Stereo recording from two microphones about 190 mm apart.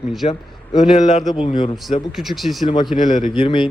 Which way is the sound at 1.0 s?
30° left (ahead or behind).